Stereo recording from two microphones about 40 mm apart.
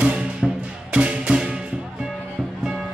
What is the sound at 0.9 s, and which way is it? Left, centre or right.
Music, right.